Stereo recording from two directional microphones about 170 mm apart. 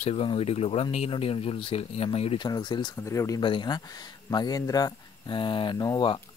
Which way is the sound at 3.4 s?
25° left (ahead or behind).